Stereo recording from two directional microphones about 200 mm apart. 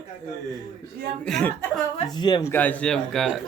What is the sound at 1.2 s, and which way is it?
Speech, 5° left (ahead or behind).